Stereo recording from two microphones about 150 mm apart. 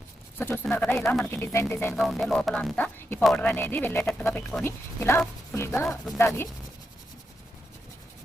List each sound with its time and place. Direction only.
0.3 s speech: 15° left (ahead or behind)
1.9 s music: centre (ahead or behind)
2.7 s speech: 10° left (ahead or behind)